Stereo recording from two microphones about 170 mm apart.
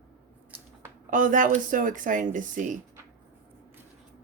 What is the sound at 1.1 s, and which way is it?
Speech, 50° right (ahead or behind).